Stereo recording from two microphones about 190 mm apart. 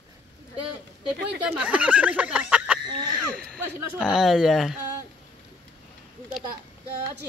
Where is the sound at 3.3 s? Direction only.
5° left (ahead or behind).